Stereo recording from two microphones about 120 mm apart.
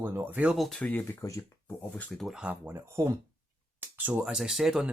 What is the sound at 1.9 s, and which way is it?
Speech, centre (ahead or behind).